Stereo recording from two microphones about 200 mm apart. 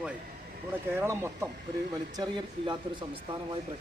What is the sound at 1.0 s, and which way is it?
Speech, 15° right (ahead or behind).